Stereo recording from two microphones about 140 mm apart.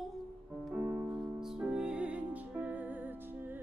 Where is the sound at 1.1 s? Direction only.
Centre (ahead or behind).